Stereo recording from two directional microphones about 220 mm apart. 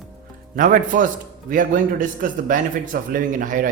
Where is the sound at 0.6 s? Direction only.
35° right (ahead or behind).